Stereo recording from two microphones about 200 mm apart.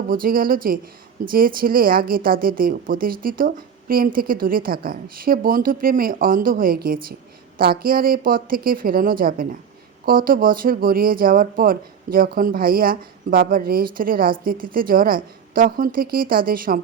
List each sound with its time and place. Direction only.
0.1 s speech: 45° right (ahead or behind)